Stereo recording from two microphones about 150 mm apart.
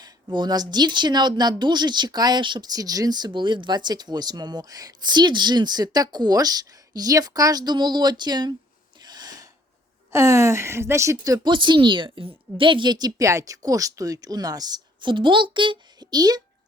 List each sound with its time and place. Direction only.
0.0 s a woman's voice: 30° right (ahead or behind)
9.0 s gasp: 30° right (ahead or behind)
10.1 s a woman's voice: 20° right (ahead or behind)